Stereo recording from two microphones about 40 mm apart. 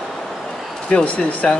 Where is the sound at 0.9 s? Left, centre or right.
Left.